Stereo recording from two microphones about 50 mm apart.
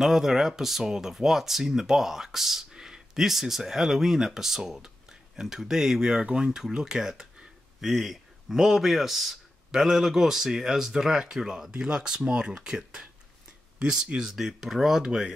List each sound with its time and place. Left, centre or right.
0.0 s speech: centre